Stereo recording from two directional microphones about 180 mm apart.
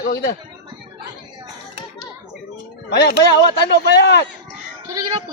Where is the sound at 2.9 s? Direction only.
70° left (ahead or behind).